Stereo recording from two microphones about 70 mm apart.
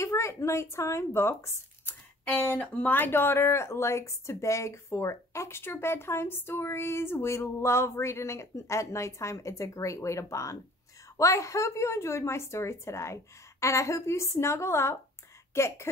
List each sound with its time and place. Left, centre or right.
0.0 s speech: left
2.4 s a woman's voice: left